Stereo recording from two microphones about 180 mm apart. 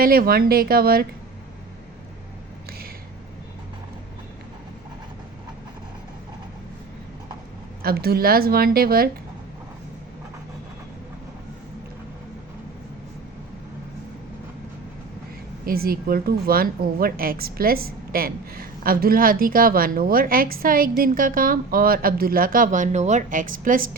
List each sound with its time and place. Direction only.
0.0 s speech: 55° right (ahead or behind)
7.8 s speech: 60° right (ahead or behind)
15.6 s a woman's voice: 55° right (ahead or behind)